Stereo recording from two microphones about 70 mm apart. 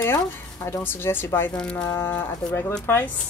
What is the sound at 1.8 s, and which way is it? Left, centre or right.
Speech, left.